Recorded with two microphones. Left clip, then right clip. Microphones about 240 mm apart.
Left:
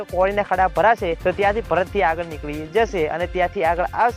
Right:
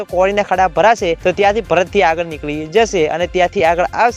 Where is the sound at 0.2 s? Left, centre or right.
Right.